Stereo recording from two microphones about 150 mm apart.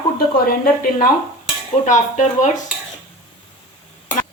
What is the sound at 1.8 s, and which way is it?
Speech, 50° left (ahead or behind).